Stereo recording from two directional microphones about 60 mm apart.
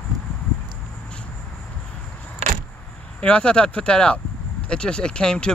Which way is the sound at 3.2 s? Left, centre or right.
Centre.